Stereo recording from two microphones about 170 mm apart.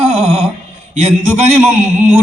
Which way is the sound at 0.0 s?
35° right (ahead or behind).